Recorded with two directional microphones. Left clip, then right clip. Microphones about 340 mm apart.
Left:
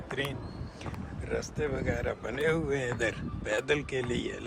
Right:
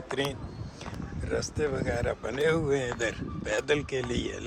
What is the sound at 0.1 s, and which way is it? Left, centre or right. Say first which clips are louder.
Speech: right 3 dB; centre.